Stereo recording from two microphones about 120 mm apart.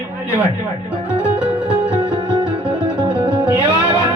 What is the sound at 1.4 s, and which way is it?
Music, 10° right (ahead or behind).